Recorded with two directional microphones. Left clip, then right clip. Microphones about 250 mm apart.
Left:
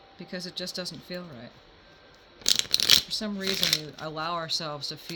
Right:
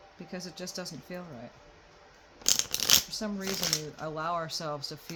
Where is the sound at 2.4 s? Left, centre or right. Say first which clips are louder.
Left 5 dB; left.